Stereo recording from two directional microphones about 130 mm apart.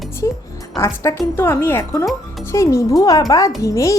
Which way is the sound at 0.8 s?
20° left (ahead or behind).